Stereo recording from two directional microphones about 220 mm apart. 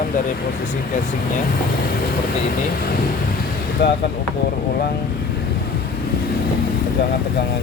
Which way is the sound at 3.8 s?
50° left (ahead or behind).